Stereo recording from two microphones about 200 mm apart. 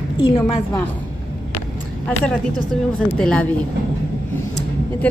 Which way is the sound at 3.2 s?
5° left (ahead or behind).